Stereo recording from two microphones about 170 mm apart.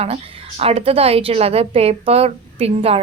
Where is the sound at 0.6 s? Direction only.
35° right (ahead or behind).